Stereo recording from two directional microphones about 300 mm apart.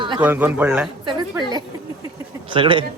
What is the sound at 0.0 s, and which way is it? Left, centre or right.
Speech, centre.